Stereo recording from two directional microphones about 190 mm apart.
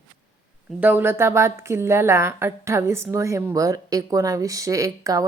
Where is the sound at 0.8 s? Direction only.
10° right (ahead or behind).